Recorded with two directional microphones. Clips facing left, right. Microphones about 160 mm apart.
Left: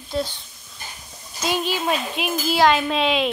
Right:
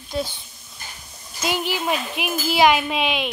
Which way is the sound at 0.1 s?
5° right (ahead or behind).